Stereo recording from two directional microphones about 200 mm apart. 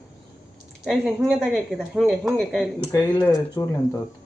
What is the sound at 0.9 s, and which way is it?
A woman's voice, centre (ahead or behind).